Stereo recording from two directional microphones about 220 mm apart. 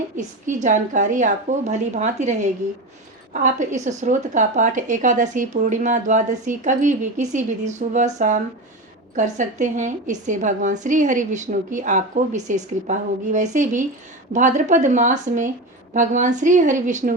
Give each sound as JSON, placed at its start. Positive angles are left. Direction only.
{"t": 0.2, "sound": "a woman's voice", "side_deg": -35}